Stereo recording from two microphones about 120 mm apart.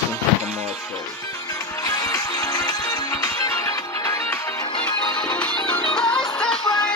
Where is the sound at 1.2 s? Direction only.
30° left (ahead or behind).